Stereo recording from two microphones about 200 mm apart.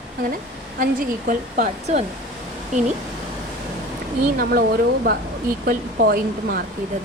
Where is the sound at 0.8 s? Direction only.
45° right (ahead or behind).